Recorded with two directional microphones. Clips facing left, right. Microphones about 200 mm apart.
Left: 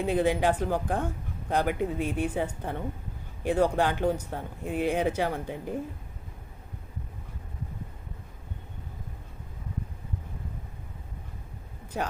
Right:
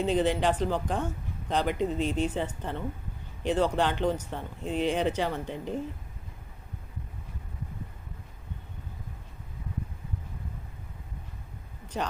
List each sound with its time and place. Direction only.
0.0 s speech: 10° left (ahead or behind)